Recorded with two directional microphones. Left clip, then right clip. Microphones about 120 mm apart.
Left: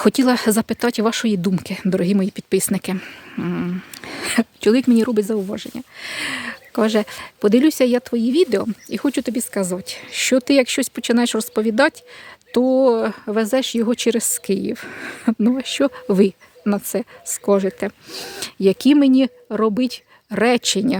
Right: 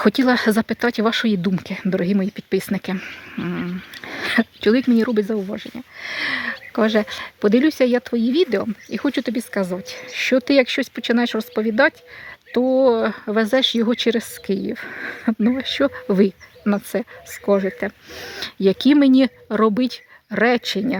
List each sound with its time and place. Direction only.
0.0 s speech: 30° left (ahead or behind)
6.8 s speech: 30° left (ahead or behind)
10.8 s speech: 40° left (ahead or behind)
12.8 s speech: 25° left (ahead or behind)
14.0 s speech: 30° left (ahead or behind)
17.5 s speech: 35° left (ahead or behind); by 19.7 s 5° left (ahead or behind)
19.7 s speech: 20° left (ahead or behind); by 21.0 s 40° left (ahead or behind)